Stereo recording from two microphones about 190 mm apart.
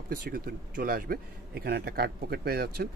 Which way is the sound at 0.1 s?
55° right (ahead or behind).